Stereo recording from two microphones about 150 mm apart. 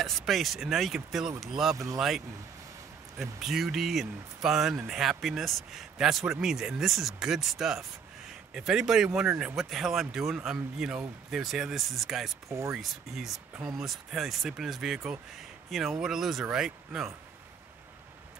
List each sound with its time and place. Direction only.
0.0 s speech: centre (ahead or behind)
12.4 s speech: 20° right (ahead or behind)
12.7 s speech: centre (ahead or behind)